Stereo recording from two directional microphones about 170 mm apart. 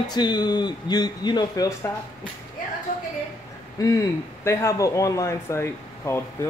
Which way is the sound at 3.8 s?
20° left (ahead or behind).